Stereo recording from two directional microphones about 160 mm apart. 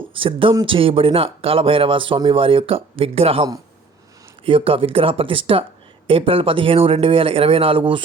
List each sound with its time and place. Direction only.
0.1 s speech: 35° right (ahead or behind)
4.4 s speech: 35° right (ahead or behind)